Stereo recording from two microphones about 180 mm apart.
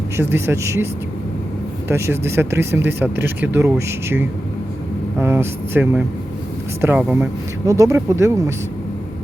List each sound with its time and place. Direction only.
0.2 s speech: 15° right (ahead or behind)
1.9 s speech: 15° right (ahead or behind)
7.7 s speech: 20° right (ahead or behind)